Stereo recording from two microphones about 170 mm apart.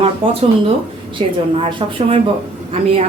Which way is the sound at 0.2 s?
30° right (ahead or behind).